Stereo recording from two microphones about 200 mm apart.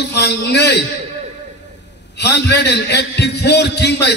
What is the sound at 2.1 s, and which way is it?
A man's voice, 55° left (ahead or behind).